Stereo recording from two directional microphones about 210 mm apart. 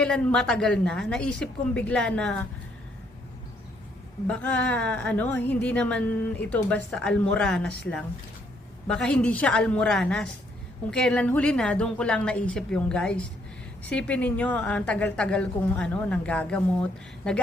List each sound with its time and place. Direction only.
0.0 s a woman's voice: 5° left (ahead or behind)
4.3 s a woman's voice: 5° left (ahead or behind)